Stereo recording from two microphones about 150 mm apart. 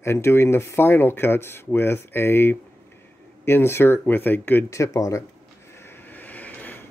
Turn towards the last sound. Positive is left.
turn(degrees=10)  # may be behind; listen again after turning